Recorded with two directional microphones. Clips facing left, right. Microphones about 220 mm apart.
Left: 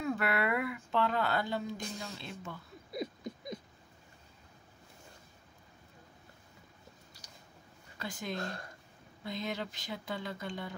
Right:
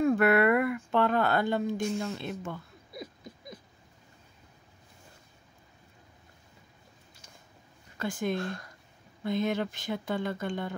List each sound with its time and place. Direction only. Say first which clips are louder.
0.0 s speech: right 10 dB; 55° right (ahead or behind)
2.9 s rodents: left 5 dB; 20° left (ahead or behind)
8.0 s speech: right 8 dB; 50° right (ahead or behind)